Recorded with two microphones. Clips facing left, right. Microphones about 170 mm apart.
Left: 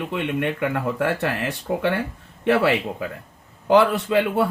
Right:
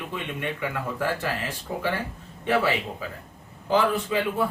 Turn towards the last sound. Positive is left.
turn(degrees=70)  # may be behind; listen again after turning